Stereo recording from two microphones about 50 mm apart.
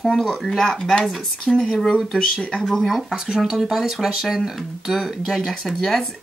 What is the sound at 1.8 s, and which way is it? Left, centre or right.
Speech, centre.